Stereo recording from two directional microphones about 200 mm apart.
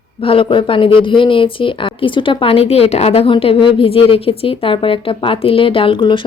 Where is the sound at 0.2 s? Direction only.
25° left (ahead or behind).